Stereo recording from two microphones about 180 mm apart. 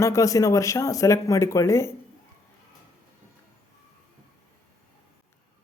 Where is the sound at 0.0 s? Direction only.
15° left (ahead or behind).